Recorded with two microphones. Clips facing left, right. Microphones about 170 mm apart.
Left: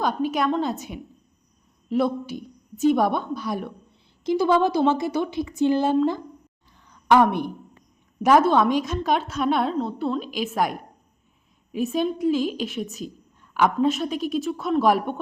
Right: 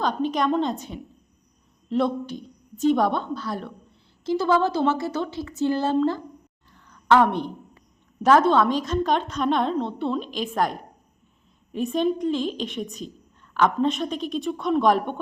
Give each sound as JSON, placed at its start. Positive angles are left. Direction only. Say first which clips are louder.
{"t": 0.0, "sound": "a woman's voice", "louder": "even", "side_deg": 10}
{"t": 6.7, "sound": "a sound", "louder": "left 1 dB", "side_deg": 15}
{"t": 8.2, "sound": "a woman's voice", "louder": "even", "side_deg": 10}